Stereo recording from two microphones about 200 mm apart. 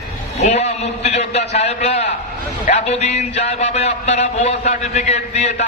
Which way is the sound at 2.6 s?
35° left (ahead or behind).